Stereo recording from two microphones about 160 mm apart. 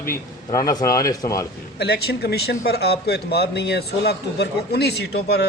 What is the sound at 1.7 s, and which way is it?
Speech, 90° left.